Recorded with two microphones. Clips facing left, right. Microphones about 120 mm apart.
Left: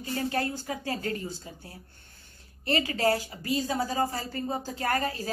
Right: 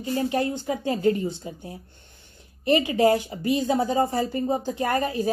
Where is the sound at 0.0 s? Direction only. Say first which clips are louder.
Right 5 dB; 20° right (ahead or behind).